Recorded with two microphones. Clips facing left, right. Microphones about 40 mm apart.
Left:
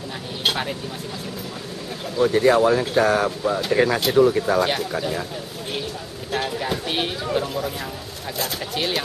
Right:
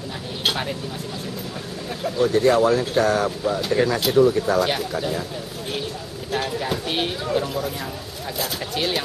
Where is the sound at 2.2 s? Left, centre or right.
Centre.